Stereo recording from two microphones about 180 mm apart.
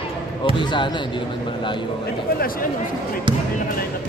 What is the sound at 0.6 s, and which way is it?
Speech, 25° left (ahead or behind).